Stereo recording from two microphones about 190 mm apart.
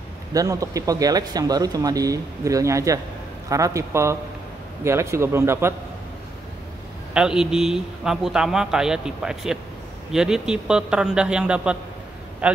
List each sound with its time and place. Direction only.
0.3 s a man's voice: 20° right (ahead or behind)
7.2 s a man's voice: 5° right (ahead or behind)